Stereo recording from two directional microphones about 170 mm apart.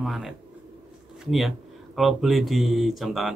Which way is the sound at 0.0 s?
Centre (ahead or behind).